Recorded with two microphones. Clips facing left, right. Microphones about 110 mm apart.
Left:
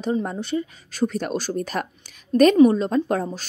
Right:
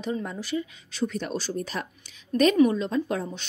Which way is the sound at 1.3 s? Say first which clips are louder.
Left 5 dB; 55° left (ahead or behind).